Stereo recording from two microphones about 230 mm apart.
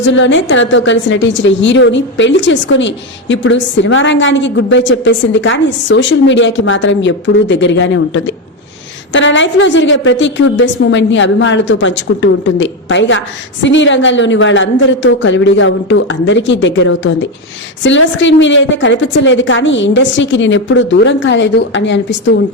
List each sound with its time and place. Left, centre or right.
0.1 s a woman's voice: left